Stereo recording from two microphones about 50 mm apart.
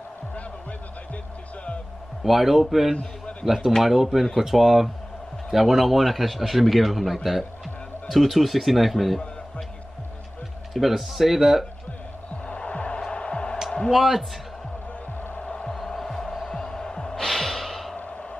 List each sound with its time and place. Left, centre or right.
2.2 s a man's voice: centre
10.7 s a man's voice: centre
12.4 s music: left
13.8 s a man's voice: centre
15.3 s music: left
15.7 s music: centre